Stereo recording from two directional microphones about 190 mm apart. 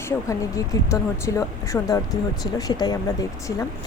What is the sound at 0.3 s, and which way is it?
A woman's voice, 15° left (ahead or behind).